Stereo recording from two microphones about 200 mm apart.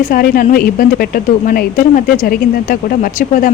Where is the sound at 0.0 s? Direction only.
45° left (ahead or behind).